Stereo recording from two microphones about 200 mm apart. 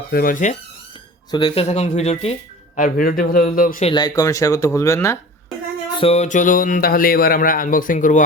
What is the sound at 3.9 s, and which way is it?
Speech, 20° left (ahead or behind).